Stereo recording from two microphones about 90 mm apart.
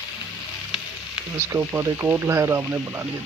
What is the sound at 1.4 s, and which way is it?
Speech, 30° right (ahead or behind).